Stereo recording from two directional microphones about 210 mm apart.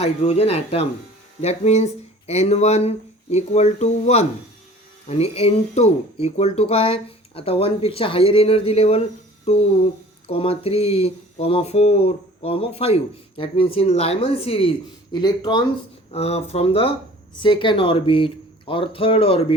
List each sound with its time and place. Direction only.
0.0 s speech: 30° left (ahead or behind)
16.1 s speech: 30° left (ahead or behind)